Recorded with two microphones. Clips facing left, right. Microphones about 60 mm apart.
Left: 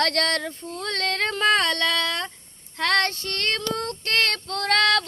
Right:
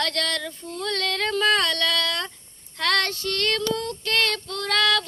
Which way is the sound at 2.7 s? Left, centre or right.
Left.